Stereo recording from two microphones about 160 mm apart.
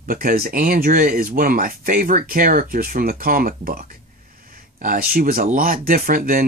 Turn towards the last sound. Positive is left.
turn(degrees=-60)  # may be behind; listen again after turning